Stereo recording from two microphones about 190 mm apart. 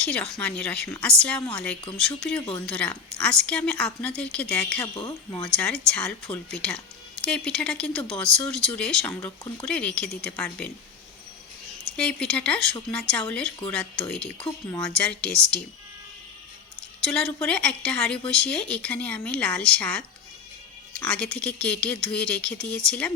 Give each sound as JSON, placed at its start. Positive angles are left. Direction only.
{"t": 0.0, "sound": "speech", "side_deg": 5}
{"t": 4.9, "sound": "speech", "side_deg": 20}
{"t": 5.5, "sound": "speech", "side_deg": 5}
{"t": 11.9, "sound": "speech", "side_deg": 5}
{"t": 17.0, "sound": "speech", "side_deg": 5}